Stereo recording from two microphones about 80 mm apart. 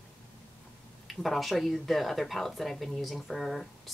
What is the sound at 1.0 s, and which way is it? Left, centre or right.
Speech, centre.